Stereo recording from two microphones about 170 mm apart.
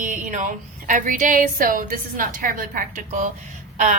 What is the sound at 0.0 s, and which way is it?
A woman's voice, 50° right (ahead or behind).